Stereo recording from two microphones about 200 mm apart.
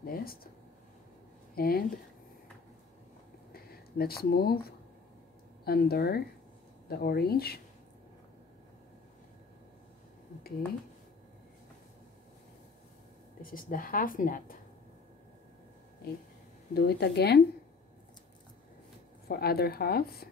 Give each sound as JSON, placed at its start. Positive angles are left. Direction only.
{"t": 0.0, "sound": "a sound", "side_deg": 50}
{"t": 1.5, "sound": "speech", "side_deg": 50}
{"t": 3.5, "sound": "a woman's voice", "side_deg": 50}
{"t": 13.4, "sound": "a woman's voice", "side_deg": 45}
{"t": 16.7, "sound": "a woman's voice", "side_deg": 55}
{"t": 19.2, "sound": "a woman's voice", "side_deg": 50}